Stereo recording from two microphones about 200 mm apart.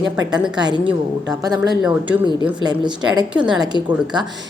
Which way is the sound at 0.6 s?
20° right (ahead or behind).